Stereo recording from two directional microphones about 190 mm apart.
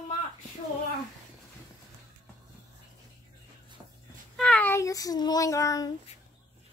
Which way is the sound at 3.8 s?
20° right (ahead or behind).